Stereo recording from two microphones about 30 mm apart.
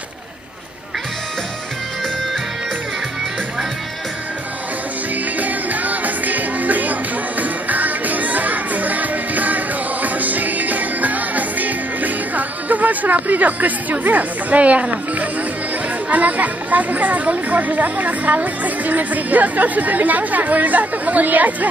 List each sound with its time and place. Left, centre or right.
5.4 s music: right
14.6 s speech: right
16.1 s speech: right